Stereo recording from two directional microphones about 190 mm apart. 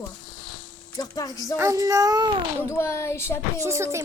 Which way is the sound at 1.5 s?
15° right (ahead or behind).